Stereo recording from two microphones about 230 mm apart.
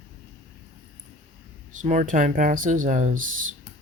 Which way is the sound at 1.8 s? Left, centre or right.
Right.